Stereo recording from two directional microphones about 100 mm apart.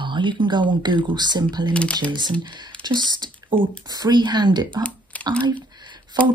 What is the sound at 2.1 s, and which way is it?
Speech, 50° right (ahead or behind).